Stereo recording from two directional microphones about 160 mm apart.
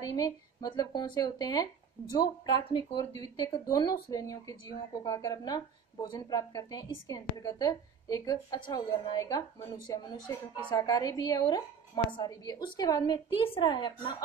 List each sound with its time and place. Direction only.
0.0 s speech: 25° left (ahead or behind)